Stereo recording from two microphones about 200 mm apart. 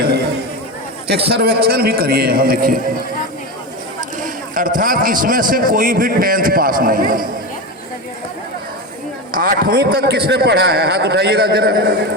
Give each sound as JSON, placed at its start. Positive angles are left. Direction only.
{"t": 1.3, "sound": "a man's voice", "side_deg": -50}
{"t": 4.2, "sound": "a man's voice", "side_deg": -40}
{"t": 9.3, "sound": "a man's voice", "side_deg": -45}